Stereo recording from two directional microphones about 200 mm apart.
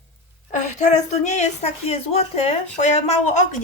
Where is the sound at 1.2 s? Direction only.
35° left (ahead or behind).